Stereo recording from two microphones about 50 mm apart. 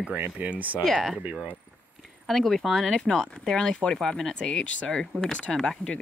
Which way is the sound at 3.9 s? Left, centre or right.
Centre.